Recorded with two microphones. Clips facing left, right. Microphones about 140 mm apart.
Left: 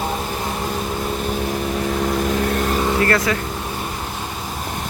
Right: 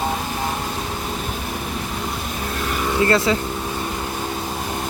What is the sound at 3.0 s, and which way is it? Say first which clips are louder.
Speech: right 1 dB; 25° right (ahead or behind).